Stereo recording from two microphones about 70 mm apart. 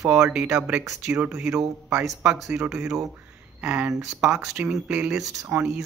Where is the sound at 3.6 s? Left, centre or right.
Right.